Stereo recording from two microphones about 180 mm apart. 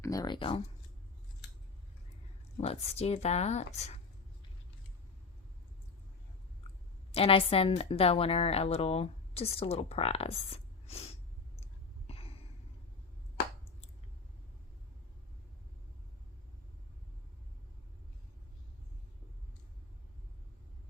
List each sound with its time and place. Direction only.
0.0 s speech: 20° left (ahead or behind)
2.6 s a woman's voice: 35° left (ahead or behind)
7.1 s a woman's voice: 30° left (ahead or behind)
11.6 s a sound: 35° left (ahead or behind)